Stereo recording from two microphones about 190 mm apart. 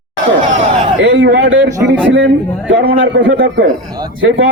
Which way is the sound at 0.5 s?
75° right (ahead or behind).